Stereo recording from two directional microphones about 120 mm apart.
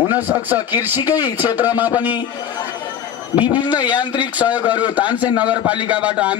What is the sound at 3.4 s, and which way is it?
Speech, 15° right (ahead or behind).